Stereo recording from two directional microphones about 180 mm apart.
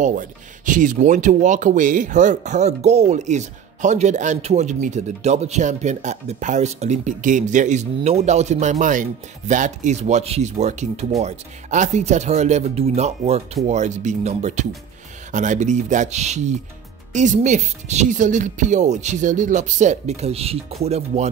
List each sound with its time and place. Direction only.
0.0 s speech: 45° right (ahead or behind)